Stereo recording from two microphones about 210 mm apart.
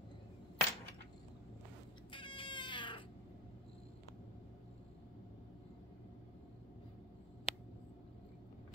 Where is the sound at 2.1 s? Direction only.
25° left (ahead or behind).